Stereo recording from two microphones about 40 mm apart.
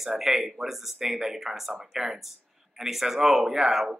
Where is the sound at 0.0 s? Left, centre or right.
Centre.